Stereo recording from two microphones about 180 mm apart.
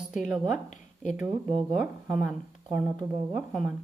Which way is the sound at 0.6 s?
45° left (ahead or behind).